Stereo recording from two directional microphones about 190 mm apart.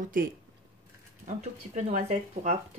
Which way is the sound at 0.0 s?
45° right (ahead or behind).